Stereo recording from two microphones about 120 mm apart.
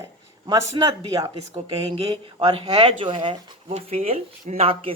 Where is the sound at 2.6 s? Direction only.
45° right (ahead or behind).